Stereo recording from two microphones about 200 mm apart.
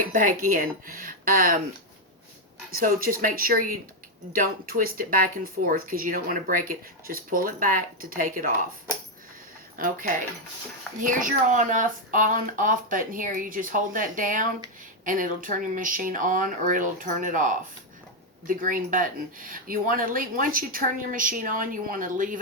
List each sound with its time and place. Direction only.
0.1 s speech: 40° right (ahead or behind)
2.7 s speech: 45° right (ahead or behind)
9.7 s speech: 45° right (ahead or behind)